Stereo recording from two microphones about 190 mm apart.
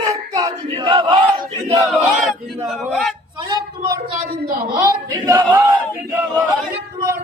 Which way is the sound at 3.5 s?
20° right (ahead or behind).